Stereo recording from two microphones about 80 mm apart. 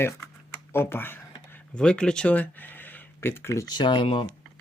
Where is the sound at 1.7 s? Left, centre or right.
Centre; by 3.6 s left.